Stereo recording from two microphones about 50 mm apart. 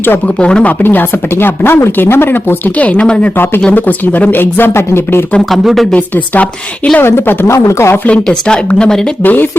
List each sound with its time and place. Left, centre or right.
0.3 s speech: left
0.7 s speech: left
2.7 s speech: left
3.3 s speech: left
3.7 s speech: left
4.7 s speech: left
5.5 s speech: centre
5.9 s speech: left
7.0 s speech: left
7.4 s speech: left
8.0 s speech: centre
9.2 s speech: left